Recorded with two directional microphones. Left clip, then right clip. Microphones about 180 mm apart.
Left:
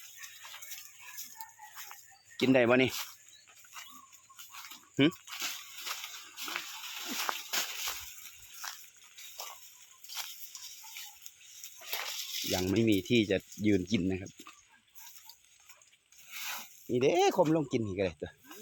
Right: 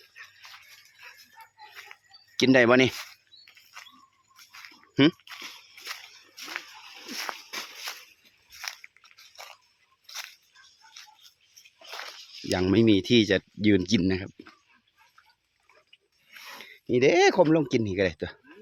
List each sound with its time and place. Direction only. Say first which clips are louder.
2.3 s speech: right 6 dB; 60° right (ahead or behind)
7.3 s a sound: left 2 dB; 5° left (ahead or behind)
11.9 s a sound: left 1 dB; 15° left (ahead or behind)
12.5 s speech: right 8 dB; 60° right (ahead or behind)
14.1 s speech: right 7 dB; 40° right (ahead or behind)
16.3 s pulleys: left 4 dB; 15° left (ahead or behind)
16.9 s speech: right 7 dB; 65° right (ahead or behind)